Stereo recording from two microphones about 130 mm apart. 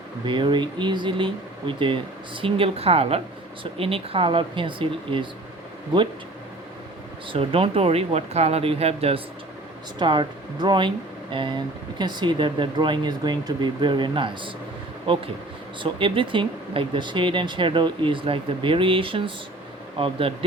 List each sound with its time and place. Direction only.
0.3 s speech: 40° right (ahead or behind)
7.3 s speech: 45° right (ahead or behind)
10.0 s speech: 35° right (ahead or behind)